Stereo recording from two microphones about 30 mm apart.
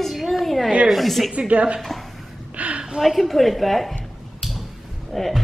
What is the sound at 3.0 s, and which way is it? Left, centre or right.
Speech, centre.